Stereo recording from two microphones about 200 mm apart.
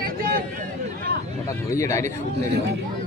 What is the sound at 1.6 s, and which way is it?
Speech, 15° left (ahead or behind).